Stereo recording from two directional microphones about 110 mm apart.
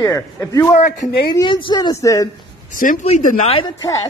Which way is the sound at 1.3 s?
45° left (ahead or behind).